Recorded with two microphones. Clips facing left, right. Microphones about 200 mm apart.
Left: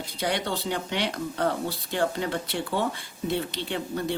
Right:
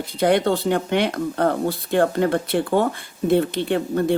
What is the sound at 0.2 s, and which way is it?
Speech, 55° right (ahead or behind).